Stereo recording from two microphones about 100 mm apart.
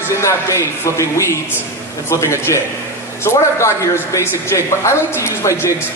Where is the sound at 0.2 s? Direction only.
30° left (ahead or behind).